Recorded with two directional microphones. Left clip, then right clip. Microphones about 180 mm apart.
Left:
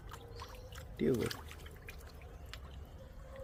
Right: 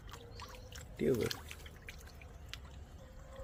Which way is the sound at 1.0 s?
5° right (ahead or behind).